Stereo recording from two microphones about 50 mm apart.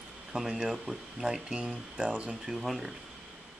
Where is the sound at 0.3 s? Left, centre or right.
Centre.